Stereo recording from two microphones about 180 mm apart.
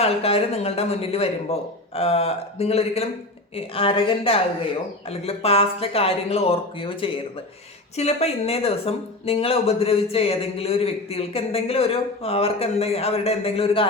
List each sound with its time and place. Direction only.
0.0 s speech: 35° left (ahead or behind)